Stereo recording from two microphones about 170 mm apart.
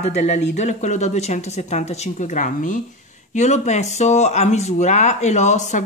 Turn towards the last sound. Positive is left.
turn(degrees=45)  # may be behind; listen again after turning